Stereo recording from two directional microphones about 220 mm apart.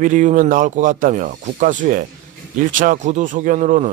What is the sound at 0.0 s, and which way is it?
Speech, 35° right (ahead or behind).